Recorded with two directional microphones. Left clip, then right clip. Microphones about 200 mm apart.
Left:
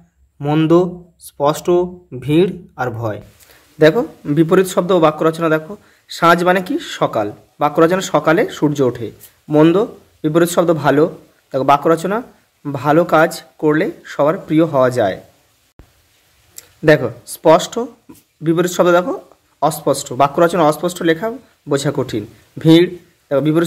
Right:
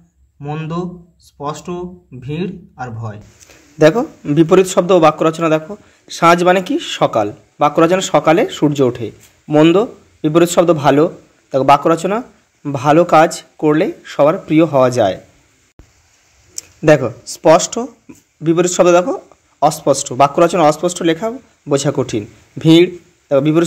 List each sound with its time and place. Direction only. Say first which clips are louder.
0.4 s speech: left 11 dB; 45° left (ahead or behind)
4.0 s speech: right 2 dB; 10° right (ahead or behind)
16.8 s speech: right 1 dB; 10° right (ahead or behind)